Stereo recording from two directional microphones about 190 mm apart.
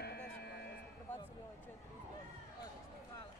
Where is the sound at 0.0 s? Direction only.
60° left (ahead or behind).